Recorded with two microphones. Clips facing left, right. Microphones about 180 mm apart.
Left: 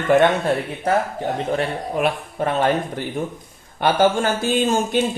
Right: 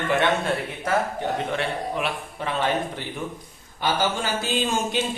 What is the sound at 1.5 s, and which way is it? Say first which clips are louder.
A man's voice: left 4 dB; 45° left (ahead or behind).